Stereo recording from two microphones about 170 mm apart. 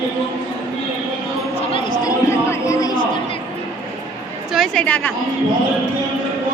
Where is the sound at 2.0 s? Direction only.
20° left (ahead or behind).